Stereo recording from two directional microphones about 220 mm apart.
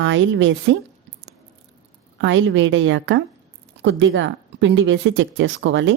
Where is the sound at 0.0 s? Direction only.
55° right (ahead or behind).